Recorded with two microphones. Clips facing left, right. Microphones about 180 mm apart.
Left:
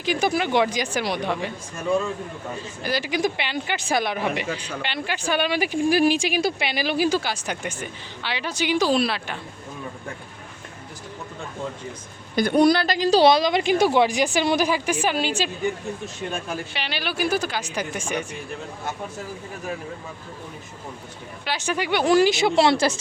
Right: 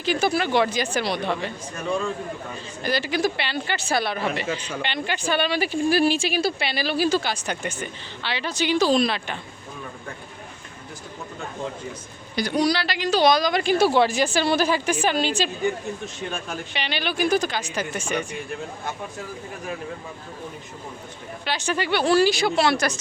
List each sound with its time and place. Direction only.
0.0 s speech: 15° left (ahead or behind)
2.8 s speech: 10° left (ahead or behind)
12.4 s speech: 55° left (ahead or behind); by 18.3 s 10° left (ahead or behind)
21.4 s speech: 10° left (ahead or behind); by 23.0 s 25° left (ahead or behind)